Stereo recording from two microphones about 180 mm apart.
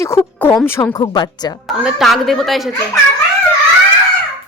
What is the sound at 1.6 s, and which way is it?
A woman's voice, 5° right (ahead or behind).